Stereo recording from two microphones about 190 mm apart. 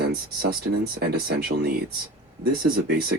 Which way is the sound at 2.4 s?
55° right (ahead or behind).